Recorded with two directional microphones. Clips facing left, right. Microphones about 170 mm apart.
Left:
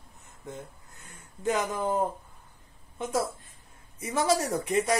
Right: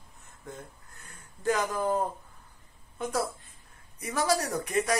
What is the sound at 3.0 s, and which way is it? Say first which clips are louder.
Speech: left 1 dB; 20° left (ahead or behind).